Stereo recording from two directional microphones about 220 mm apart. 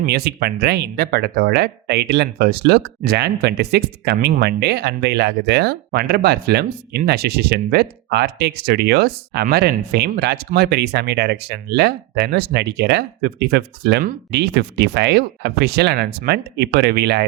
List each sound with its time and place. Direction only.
0.0 s speech: 50° right (ahead or behind)